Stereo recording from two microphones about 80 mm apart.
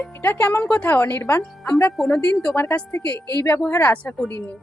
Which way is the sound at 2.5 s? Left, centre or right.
Left.